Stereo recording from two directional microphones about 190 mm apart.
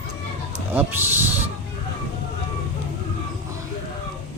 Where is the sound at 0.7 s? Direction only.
10° right (ahead or behind).